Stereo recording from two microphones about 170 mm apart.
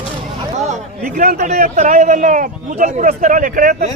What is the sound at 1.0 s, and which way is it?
Speech, 55° right (ahead or behind).